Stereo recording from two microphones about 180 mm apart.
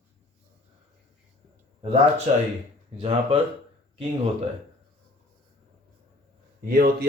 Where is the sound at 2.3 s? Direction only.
40° right (ahead or behind).